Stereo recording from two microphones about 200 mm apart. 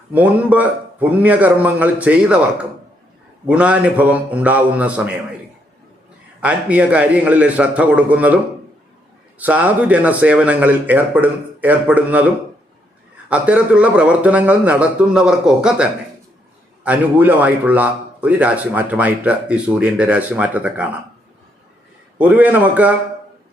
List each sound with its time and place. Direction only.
0.1 s a man's voice: 10° right (ahead or behind)
6.4 s a man's voice: 5° right (ahead or behind)
9.4 s a man's voice: 5° right (ahead or behind)
22.2 s a man's voice: 10° right (ahead or behind)